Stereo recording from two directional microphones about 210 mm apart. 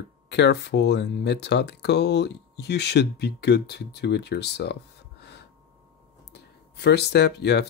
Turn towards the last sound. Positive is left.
turn(degrees=55)  # may be behind; listen again after turning